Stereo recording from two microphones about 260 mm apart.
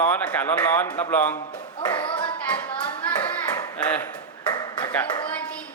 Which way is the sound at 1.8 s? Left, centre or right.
Centre.